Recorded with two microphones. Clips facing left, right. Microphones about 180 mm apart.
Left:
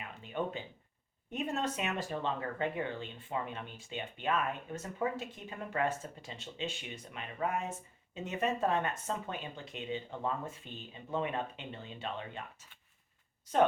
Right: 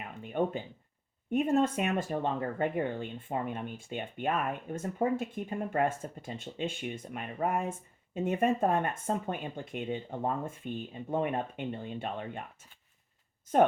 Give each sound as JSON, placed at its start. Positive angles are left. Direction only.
{"t": 0.2, "sound": "speech", "side_deg": -50}